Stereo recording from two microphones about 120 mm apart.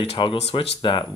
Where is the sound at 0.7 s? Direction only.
40° left (ahead or behind).